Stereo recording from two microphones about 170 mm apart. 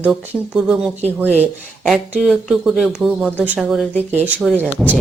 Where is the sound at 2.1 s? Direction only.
5° right (ahead or behind).